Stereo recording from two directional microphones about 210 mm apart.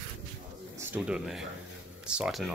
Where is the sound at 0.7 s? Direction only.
5° right (ahead or behind).